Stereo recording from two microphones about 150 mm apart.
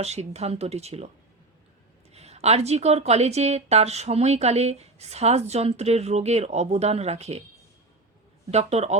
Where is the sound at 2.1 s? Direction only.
45° right (ahead or behind).